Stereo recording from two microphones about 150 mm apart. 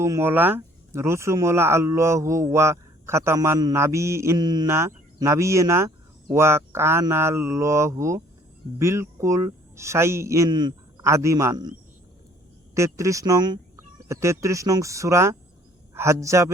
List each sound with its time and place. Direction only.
0.0 s speech: 15° right (ahead or behind)
12.7 s speech: 20° right (ahead or behind)